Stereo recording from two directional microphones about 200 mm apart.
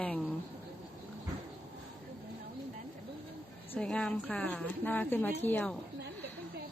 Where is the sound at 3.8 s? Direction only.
5° left (ahead or behind).